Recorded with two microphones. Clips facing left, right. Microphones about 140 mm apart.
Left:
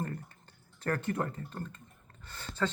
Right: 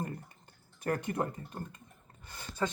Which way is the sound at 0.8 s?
15° right (ahead or behind).